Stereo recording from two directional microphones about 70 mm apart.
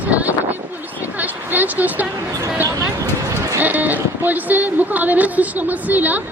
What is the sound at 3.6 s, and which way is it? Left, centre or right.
Sheep, right.